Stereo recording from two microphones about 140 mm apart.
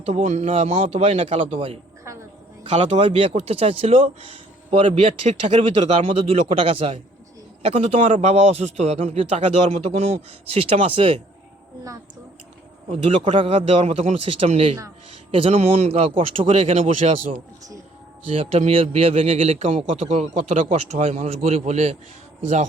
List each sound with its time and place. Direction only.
0.0 s a man's voice: 50° right (ahead or behind)
12.9 s a man's voice: 40° right (ahead or behind)
18.3 s a man's voice: 45° right (ahead or behind)